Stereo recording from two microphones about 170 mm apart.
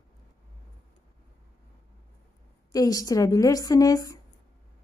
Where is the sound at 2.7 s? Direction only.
20° left (ahead or behind).